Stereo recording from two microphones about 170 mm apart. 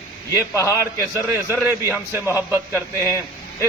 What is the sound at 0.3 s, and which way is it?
Speech, 15° left (ahead or behind).